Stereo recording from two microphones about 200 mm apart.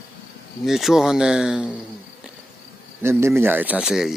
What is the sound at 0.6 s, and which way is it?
Speech, centre (ahead or behind).